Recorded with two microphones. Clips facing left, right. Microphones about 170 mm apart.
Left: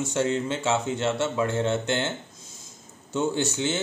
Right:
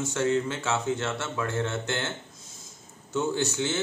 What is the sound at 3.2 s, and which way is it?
Speech, 20° left (ahead or behind).